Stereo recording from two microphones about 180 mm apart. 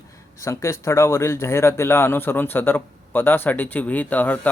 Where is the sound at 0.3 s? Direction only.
15° left (ahead or behind).